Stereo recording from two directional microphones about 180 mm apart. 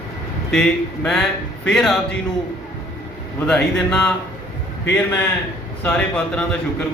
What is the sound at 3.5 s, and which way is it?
Speech, 5° left (ahead or behind).